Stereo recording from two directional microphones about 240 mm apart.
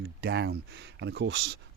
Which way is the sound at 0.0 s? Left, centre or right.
Right.